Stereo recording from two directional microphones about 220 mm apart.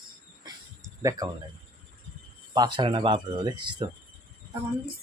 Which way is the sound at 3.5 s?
90° right.